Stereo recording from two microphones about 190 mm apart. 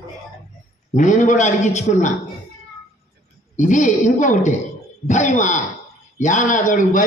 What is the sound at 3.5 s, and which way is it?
A man's voice, 40° left (ahead or behind).